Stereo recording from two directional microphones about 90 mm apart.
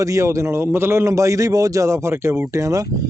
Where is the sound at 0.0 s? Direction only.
35° right (ahead or behind).